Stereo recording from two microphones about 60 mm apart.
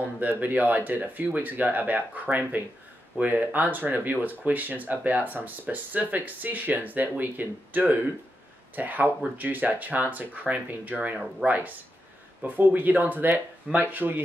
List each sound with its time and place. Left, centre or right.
0.4 s speech: right